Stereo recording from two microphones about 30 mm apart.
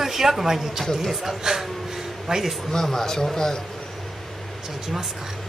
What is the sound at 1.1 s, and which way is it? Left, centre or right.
A man's voice, centre.